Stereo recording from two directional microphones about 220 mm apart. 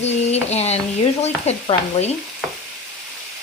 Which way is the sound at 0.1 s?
30° left (ahead or behind).